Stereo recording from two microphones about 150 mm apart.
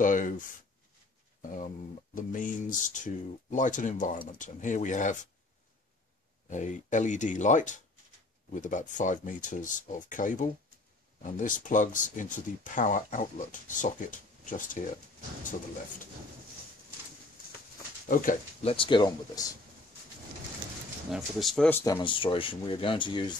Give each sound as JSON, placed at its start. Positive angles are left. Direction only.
{"t": 0.0, "sound": "speech", "side_deg": 60}
{"t": 6.5, "sound": "speech", "side_deg": 55}
{"t": 18.0, "sound": "speech", "side_deg": 65}
{"t": 18.6, "sound": "speech", "side_deg": 40}
{"t": 21.1, "sound": "speech", "side_deg": 0}
{"t": 22.0, "sound": "speech", "side_deg": 35}